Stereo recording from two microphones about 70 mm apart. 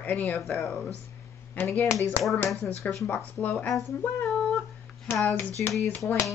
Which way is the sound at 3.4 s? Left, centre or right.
Left.